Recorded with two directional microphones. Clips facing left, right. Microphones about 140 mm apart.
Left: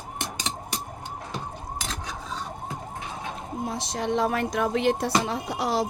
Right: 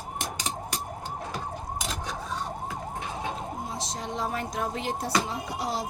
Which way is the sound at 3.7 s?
65° left (ahead or behind).